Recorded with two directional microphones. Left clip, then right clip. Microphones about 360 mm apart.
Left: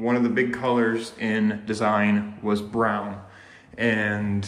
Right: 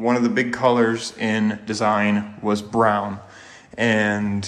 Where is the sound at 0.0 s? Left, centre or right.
Centre.